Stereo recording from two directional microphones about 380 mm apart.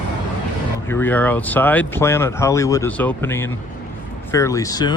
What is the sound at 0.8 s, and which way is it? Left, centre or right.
Speech, centre.